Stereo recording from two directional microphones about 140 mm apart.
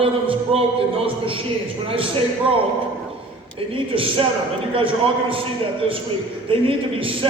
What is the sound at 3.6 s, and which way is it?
A man's voice, 40° right (ahead or behind).